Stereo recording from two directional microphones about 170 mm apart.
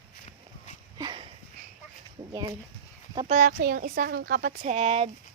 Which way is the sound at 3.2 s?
55° right (ahead or behind).